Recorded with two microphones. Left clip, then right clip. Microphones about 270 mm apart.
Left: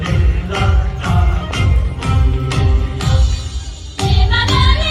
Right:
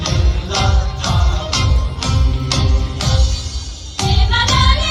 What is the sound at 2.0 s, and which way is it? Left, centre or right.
Music, right.